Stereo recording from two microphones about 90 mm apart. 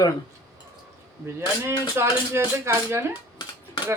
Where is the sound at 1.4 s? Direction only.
30° right (ahead or behind).